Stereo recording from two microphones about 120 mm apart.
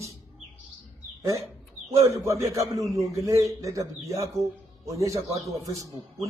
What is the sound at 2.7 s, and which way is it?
Speech, centre (ahead or behind).